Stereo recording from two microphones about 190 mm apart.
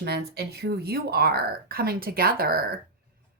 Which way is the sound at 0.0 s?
60° right (ahead or behind).